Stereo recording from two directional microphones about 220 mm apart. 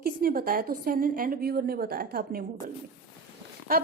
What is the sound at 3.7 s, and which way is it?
Speech, 40° right (ahead or behind).